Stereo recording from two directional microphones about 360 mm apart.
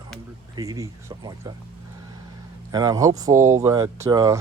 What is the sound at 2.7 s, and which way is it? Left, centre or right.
Speech, centre.